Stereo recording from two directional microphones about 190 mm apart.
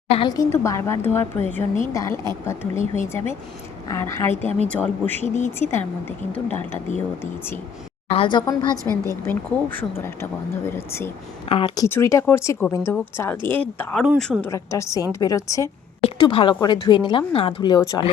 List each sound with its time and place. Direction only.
0.1 s a woman's voice: 25° left (ahead or behind)
3.8 s a woman's voice: 15° left (ahead or behind)
4.4 s speech: 35° right (ahead or behind)
4.7 s a woman's voice: 10° left (ahead or behind)
5.2 s speech: 35° left (ahead or behind)
8.1 s speech: 25° left (ahead or behind)
8.7 s a woman's voice: 15° right (ahead or behind)
9.2 s a woman's voice: 10° left (ahead or behind)
11.5 s speech: 25° left (ahead or behind)
11.9 s a woman's voice: 15° left (ahead or behind)
14.0 s a woman's voice: centre (ahead or behind)
14.5 s a woman's voice: 15° left (ahead or behind)
16.0 s speech: 30° left (ahead or behind)